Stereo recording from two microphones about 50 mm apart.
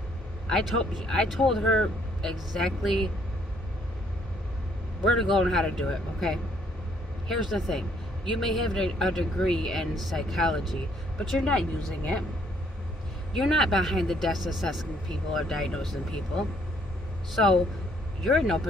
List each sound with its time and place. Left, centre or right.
0.5 s a man's voice: centre
5.0 s a man's voice: centre
12.0 s speech: left
13.3 s speech: centre
15.0 s a man's voice: centre
18.2 s speech: centre